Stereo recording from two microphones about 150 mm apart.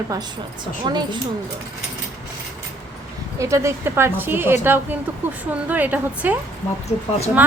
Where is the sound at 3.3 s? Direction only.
20° right (ahead or behind).